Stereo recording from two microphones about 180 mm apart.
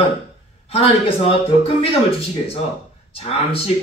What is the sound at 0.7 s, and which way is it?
A man's voice, 30° left (ahead or behind).